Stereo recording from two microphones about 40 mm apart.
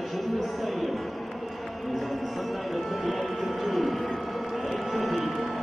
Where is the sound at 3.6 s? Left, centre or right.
Centre.